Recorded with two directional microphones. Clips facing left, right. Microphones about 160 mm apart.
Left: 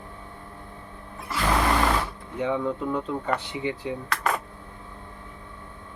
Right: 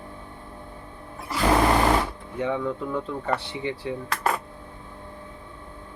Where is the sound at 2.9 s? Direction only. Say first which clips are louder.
Even; 15° left (ahead or behind).